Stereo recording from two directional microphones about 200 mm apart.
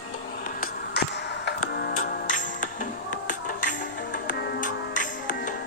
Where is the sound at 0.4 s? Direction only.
45° left (ahead or behind).